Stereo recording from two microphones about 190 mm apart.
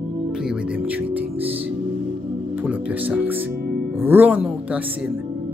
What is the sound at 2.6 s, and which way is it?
Speech, 5° right (ahead or behind).